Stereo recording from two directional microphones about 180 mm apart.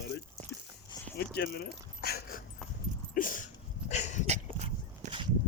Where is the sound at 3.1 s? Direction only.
50° left (ahead or behind).